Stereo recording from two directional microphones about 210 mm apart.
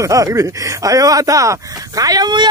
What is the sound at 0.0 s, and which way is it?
Speech, 15° right (ahead or behind).